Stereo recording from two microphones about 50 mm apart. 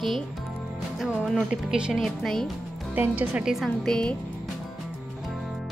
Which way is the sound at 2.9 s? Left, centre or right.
Right.